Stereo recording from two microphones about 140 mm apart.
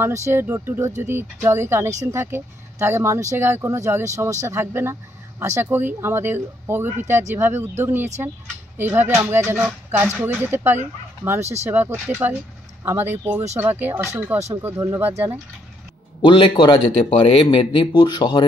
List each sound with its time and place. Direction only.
0.0 s speech: 20° right (ahead or behind)
16.2 s speech: 35° left (ahead or behind)